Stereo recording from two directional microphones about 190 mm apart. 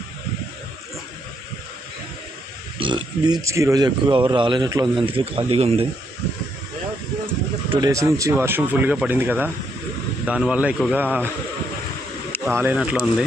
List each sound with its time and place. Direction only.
2.7 s speech: 25° right (ahead or behind)
7.7 s speech: 20° right (ahead or behind)
12.5 s speech: 10° right (ahead or behind)